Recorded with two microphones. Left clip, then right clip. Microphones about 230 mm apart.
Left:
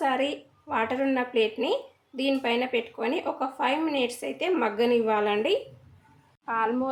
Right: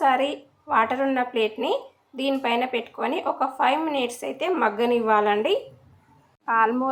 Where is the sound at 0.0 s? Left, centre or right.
Centre.